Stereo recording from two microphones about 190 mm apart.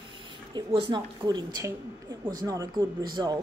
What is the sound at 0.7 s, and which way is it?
Speech, 30° right (ahead or behind).